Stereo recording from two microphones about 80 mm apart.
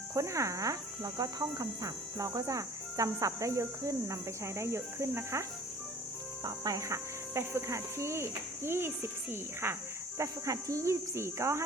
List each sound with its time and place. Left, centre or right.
0.1 s speech: right
6.4 s speech: right
10.2 s speech: right